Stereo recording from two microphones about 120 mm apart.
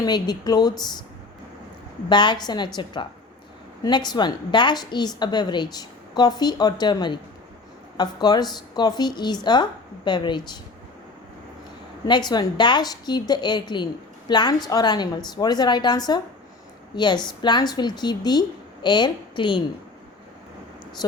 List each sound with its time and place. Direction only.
0.0 s a woman's voice: 35° left (ahead or behind)
2.0 s a woman's voice: 40° left (ahead or behind)
12.0 s a woman's voice: 40° left (ahead or behind)
21.0 s speech: 35° left (ahead or behind)